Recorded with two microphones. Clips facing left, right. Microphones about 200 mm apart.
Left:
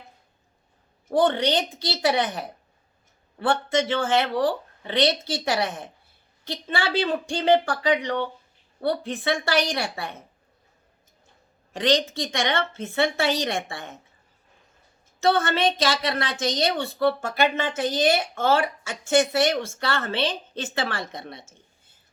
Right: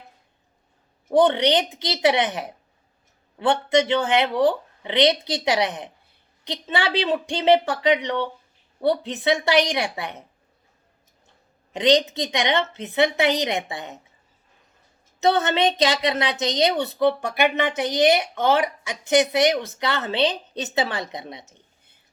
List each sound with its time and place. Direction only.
1.0 s a woman's voice: 20° right (ahead or behind)
11.7 s a woman's voice: 20° right (ahead or behind)
15.2 s a woman's voice: 20° right (ahead or behind)